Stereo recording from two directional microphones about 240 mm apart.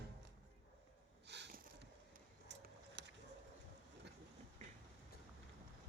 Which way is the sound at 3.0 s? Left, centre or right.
Right.